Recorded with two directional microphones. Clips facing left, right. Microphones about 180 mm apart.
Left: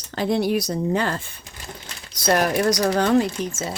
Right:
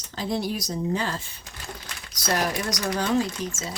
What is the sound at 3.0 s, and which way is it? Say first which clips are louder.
Speech: left 3 dB; 60° left (ahead or behind).